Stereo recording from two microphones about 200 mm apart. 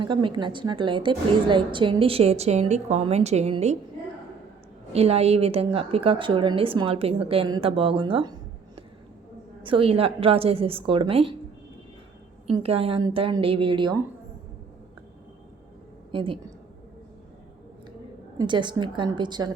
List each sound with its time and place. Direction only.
0.0 s a woman's voice: 25° right (ahead or behind)
4.9 s a woman's voice: 30° right (ahead or behind)
12.5 s a woman's voice: 30° right (ahead or behind)
16.1 s a woman's voice: 25° right (ahead or behind)
18.3 s a woman's voice: 25° right (ahead or behind)